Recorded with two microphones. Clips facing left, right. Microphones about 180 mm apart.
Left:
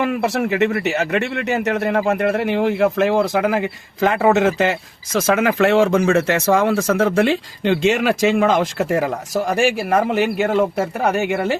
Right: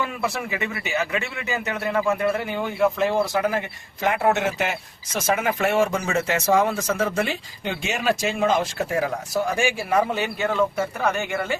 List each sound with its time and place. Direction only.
0.0 s a man's voice: 70° left (ahead or behind)
3.0 s speech: 90° left
9.0 s speech: 45° left (ahead or behind)
9.5 s a man's voice: 70° left (ahead or behind)
10.8 s speech: 40° left (ahead or behind)